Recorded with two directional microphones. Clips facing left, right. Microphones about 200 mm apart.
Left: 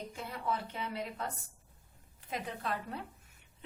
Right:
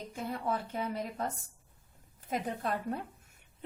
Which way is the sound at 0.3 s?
45° right (ahead or behind).